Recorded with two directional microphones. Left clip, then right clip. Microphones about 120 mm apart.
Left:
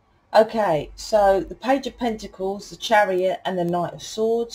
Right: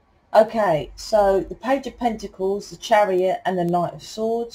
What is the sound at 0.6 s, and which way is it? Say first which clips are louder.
Speech: right 1 dB; 45° left (ahead or behind).